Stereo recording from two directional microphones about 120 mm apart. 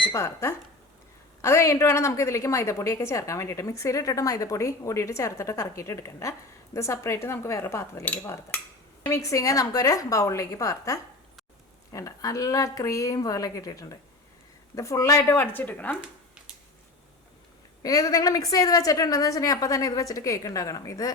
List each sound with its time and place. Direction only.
0.1 s a woman's voice: 20° left (ahead or behind)
9.0 s a woman's voice: 25° left (ahead or behind)
17.8 s a woman's voice: 30° left (ahead or behind)